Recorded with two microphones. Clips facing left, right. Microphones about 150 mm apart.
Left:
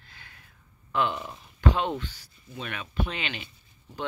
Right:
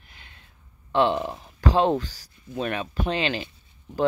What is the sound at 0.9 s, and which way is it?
Speech, 30° right (ahead or behind).